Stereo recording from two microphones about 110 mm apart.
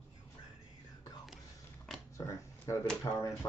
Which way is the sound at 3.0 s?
35° left (ahead or behind).